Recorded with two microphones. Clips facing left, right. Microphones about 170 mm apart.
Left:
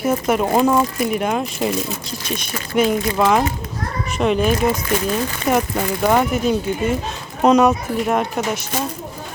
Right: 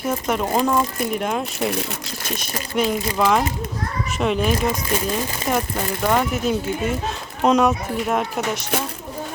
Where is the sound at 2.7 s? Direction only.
5° left (ahead or behind).